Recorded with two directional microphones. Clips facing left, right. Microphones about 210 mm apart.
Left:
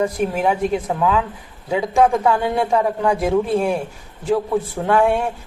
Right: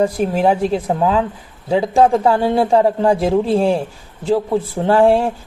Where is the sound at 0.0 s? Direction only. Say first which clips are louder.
Right 4 dB; 30° right (ahead or behind).